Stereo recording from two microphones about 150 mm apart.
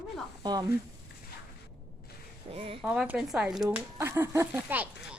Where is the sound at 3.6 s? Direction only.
15° right (ahead or behind).